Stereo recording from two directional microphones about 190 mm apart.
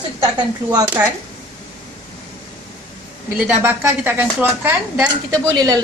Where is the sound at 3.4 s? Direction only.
10° right (ahead or behind).